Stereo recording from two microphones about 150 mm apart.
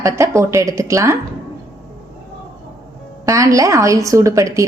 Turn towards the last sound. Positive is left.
turn(degrees=-20)  # may be behind; listen again after turning